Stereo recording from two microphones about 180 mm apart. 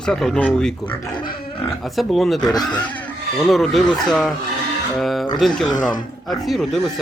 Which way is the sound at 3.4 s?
Centre (ahead or behind).